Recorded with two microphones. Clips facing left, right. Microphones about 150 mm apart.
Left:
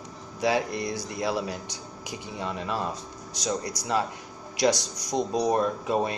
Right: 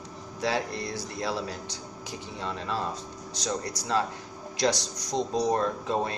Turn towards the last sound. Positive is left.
turn(degrees=15)  # may be behind; listen again after turning